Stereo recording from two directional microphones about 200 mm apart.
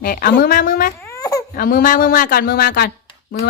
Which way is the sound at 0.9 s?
15° left (ahead or behind).